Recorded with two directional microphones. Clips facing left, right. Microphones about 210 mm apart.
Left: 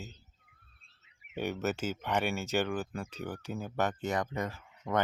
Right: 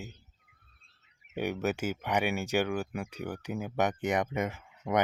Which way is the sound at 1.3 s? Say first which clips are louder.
Right 2 dB; 15° right (ahead or behind).